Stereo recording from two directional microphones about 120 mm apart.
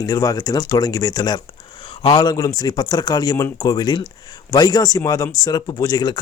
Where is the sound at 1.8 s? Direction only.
45° left (ahead or behind).